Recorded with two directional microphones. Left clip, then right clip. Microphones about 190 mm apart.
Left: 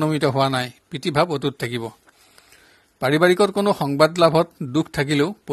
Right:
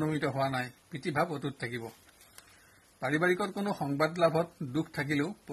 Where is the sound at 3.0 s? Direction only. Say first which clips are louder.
Left 13 dB; 35° left (ahead or behind).